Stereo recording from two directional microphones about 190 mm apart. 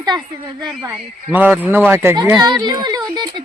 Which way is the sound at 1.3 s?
10° right (ahead or behind).